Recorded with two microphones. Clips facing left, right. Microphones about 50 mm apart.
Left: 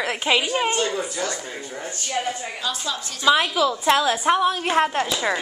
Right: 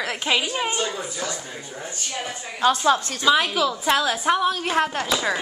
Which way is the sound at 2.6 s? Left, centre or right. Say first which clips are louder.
Right 12 dB; right.